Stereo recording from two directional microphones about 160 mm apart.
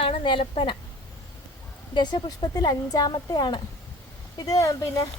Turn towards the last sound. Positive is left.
turn(degrees=20)  # may be behind; listen again after turning